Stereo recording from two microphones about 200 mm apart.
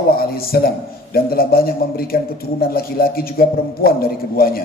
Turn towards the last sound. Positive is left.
turn(degrees=50)  # may be behind; listen again after turning